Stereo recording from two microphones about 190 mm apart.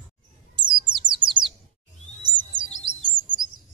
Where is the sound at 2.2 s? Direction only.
25° right (ahead or behind).